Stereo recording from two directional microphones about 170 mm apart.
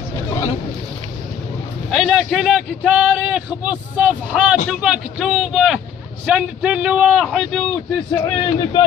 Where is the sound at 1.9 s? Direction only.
5° right (ahead or behind).